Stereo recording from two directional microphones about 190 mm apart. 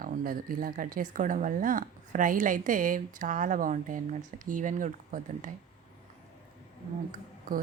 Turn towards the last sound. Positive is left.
turn(degrees=-45)  # may be behind; listen again after turning